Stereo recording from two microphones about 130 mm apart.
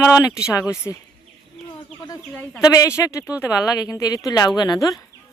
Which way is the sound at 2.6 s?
25° left (ahead or behind).